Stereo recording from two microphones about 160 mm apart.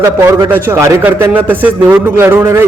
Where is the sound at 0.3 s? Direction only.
15° right (ahead or behind).